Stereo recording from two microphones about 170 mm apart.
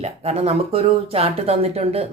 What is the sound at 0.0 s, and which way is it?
A woman's voice, 35° right (ahead or behind).